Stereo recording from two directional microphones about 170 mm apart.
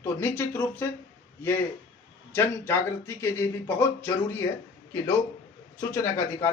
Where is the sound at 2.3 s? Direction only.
15° left (ahead or behind).